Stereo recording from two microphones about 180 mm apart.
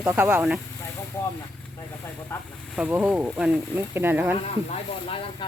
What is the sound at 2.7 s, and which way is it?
Speech, 5° right (ahead or behind).